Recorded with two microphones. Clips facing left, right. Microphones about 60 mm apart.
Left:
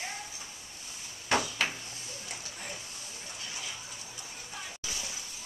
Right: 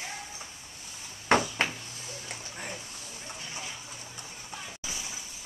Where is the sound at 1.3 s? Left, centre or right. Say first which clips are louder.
Right 5 dB; right.